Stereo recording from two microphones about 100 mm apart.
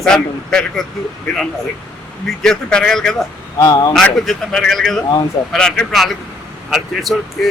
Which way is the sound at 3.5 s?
40° left (ahead or behind).